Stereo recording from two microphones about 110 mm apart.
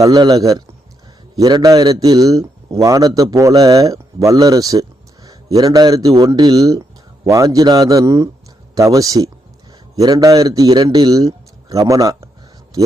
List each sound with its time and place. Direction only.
0.0 s a man's voice: 35° right (ahead or behind)